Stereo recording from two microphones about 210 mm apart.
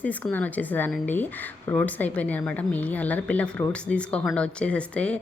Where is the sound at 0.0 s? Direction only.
5° left (ahead or behind).